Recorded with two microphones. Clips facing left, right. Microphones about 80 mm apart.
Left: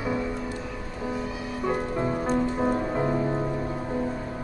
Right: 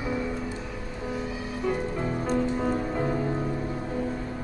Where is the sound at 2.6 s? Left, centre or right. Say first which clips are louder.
Left 2 dB; left.